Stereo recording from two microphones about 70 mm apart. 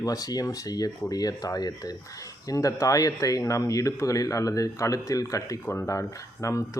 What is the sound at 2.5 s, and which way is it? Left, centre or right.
Speech, left.